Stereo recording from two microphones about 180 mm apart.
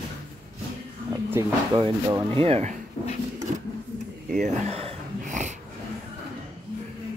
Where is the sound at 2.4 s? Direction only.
35° right (ahead or behind).